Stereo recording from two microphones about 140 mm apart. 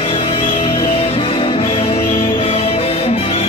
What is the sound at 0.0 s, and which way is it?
Music, 40° left (ahead or behind).